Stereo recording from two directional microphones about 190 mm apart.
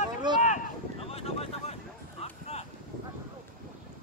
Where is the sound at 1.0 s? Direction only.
30° left (ahead or behind).